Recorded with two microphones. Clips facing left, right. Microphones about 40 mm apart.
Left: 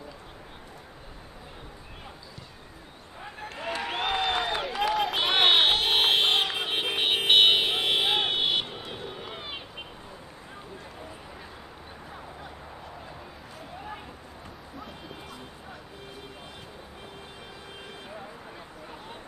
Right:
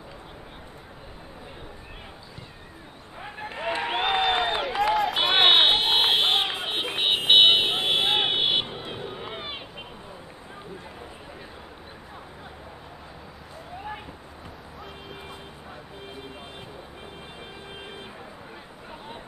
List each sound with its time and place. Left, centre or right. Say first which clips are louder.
3.2 s a sound: right 4 dB; centre
4.9 s run: right 3 dB; centre
5.2 s fire alarm: right 3 dB; right